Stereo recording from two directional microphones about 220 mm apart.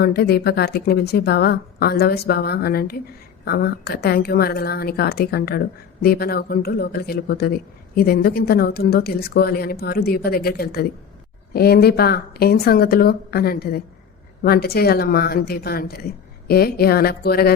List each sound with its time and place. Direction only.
0.0 s a woman's voice: 45° left (ahead or behind)